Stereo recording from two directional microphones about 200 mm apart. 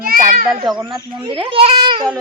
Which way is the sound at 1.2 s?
25° right (ahead or behind).